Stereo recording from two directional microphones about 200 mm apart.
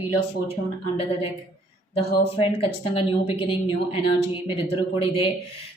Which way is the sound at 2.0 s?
30° left (ahead or behind).